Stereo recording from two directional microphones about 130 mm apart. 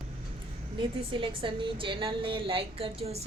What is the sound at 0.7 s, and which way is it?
A woman's voice, 40° right (ahead or behind).